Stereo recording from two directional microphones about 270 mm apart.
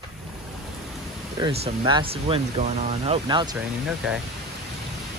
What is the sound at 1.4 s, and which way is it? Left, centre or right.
Speech, centre.